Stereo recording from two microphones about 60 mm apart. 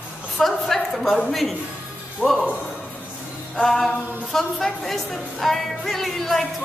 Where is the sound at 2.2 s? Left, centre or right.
Left.